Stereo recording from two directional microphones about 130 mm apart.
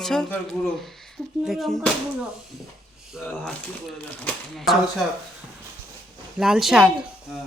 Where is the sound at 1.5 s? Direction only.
Centre (ahead or behind).